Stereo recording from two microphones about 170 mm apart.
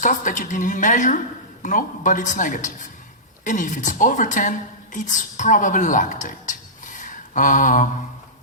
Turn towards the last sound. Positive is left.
turn(degrees=50)  # may be behind; listen again after turning